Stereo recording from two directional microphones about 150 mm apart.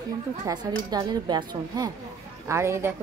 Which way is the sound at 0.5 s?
25° right (ahead or behind).